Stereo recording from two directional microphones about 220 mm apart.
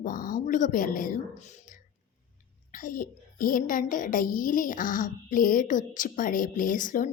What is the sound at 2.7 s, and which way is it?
A woman's voice, 40° left (ahead or behind).